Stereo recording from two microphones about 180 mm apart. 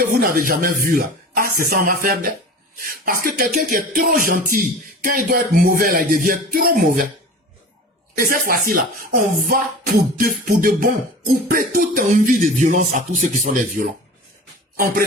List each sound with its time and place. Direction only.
0.0 s speech: 50° right (ahead or behind)
8.3 s speech: 50° right (ahead or behind)